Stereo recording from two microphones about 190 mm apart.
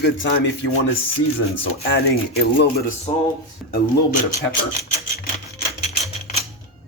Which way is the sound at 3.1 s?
30° left (ahead or behind).